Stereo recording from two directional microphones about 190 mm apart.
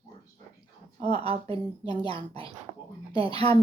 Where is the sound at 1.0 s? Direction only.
30° right (ahead or behind).